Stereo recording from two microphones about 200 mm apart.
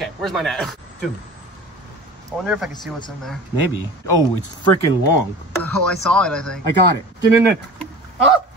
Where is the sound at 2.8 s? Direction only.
20° left (ahead or behind).